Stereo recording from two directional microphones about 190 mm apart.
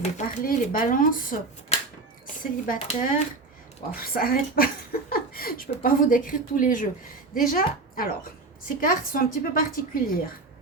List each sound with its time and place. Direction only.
0.0 s a woman's voice: 45° left (ahead or behind)